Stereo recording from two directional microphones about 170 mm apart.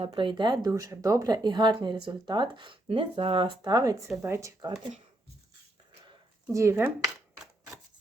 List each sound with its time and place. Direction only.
0.0 s speech: 30° right (ahead or behind)
6.5 s speech: 15° right (ahead or behind)